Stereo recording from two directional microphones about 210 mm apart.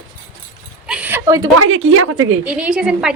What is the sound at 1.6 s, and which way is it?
Speech, 70° right (ahead or behind).